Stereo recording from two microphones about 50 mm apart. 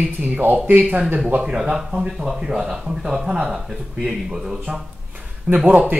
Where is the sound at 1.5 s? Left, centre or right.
Centre.